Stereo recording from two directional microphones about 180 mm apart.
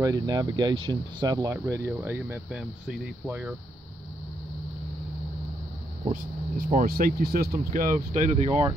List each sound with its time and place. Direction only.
0.0 s speech: 20° right (ahead or behind)
6.5 s speech: 50° right (ahead or behind); by 8.7 s 30° right (ahead or behind)